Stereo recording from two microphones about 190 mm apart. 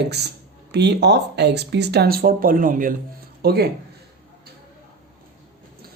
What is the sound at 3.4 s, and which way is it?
Speech, 55° right (ahead or behind).